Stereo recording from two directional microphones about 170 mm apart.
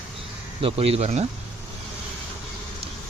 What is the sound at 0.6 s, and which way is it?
Speech, 35° right (ahead or behind).